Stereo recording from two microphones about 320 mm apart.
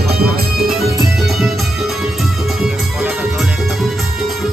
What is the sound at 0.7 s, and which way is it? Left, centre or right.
Music, centre.